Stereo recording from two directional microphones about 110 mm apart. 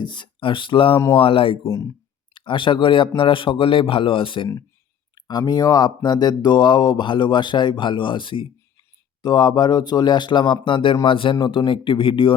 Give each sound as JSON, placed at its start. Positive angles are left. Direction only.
{"t": 0.0, "sound": "speech", "side_deg": 45}
{"t": 1.6, "sound": "speech", "side_deg": 30}
{"t": 2.3, "sound": "speech", "side_deg": 50}
{"t": 5.1, "sound": "speech", "side_deg": 40}